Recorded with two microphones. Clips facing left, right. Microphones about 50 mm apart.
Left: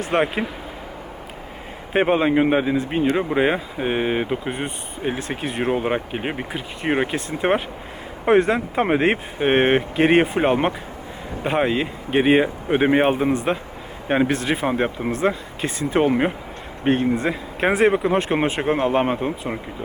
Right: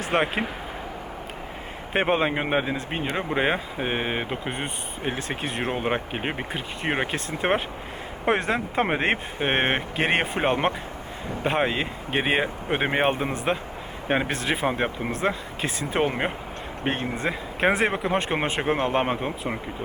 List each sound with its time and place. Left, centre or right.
0.1 s speech: centre
1.9 s speech: centre
17.2 s speech: centre